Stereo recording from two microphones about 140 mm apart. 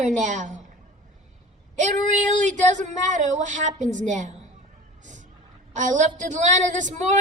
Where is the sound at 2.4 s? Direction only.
60° right (ahead or behind).